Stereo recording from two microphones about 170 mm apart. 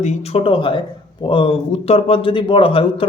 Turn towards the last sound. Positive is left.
turn(degrees=30)  # may be behind; listen again after turning